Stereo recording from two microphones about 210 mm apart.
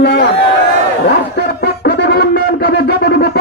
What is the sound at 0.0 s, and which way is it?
Speech, 50° left (ahead or behind).